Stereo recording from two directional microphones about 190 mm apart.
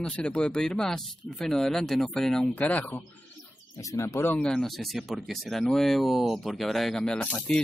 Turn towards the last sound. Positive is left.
turn(degrees=5)  # may be behind; listen again after turning